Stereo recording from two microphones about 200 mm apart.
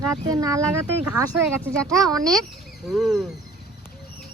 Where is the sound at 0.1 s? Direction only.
20° right (ahead or behind).